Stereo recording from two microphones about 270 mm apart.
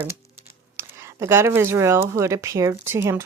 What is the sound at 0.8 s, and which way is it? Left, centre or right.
A woman's voice, centre.